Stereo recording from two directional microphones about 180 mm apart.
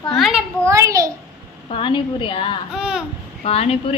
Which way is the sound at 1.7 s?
30° left (ahead or behind).